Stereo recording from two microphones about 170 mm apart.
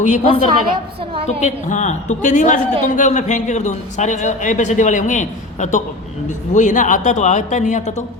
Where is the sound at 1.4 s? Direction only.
45° left (ahead or behind).